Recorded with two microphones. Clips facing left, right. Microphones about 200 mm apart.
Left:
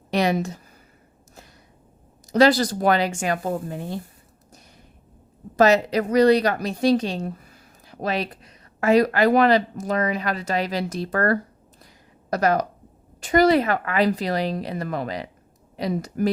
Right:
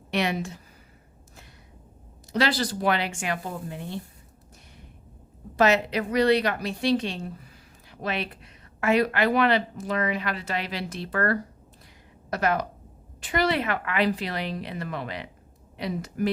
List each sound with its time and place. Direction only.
0.1 s a woman's voice: 40° left (ahead or behind)
2.3 s speech: 40° left (ahead or behind)
5.5 s a woman's voice: 40° left (ahead or behind)